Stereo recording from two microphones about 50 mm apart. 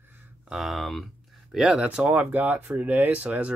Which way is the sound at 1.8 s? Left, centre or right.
Right.